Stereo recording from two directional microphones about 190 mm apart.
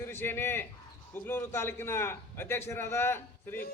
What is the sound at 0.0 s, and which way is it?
A man's voice, 10° left (ahead or behind).